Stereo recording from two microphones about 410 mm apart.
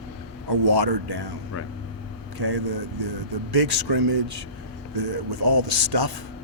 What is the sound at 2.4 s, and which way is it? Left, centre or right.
Speech, right.